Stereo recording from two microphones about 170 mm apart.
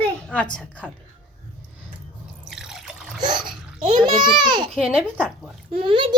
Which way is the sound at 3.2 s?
25° right (ahead or behind).